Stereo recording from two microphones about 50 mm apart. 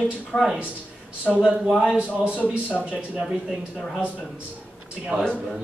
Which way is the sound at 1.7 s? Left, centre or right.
Centre.